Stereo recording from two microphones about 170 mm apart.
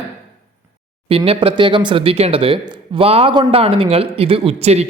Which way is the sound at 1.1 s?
35° right (ahead or behind).